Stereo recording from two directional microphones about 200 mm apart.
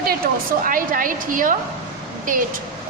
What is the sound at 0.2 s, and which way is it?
A woman's voice, 50° right (ahead or behind).